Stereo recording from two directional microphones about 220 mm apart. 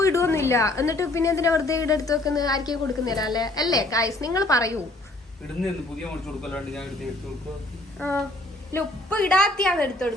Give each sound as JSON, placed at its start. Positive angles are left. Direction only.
{"t": 0.0, "sound": "a woman's voice", "side_deg": 15}
{"t": 5.6, "sound": "a woman's voice", "side_deg": 0}
{"t": 7.9, "sound": "a woman's voice", "side_deg": 5}